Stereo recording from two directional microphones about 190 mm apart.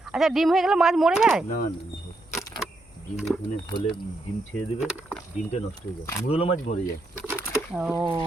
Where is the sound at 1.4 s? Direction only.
50° left (ahead or behind).